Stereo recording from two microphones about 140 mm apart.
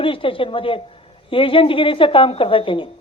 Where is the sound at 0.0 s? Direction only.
40° left (ahead or behind).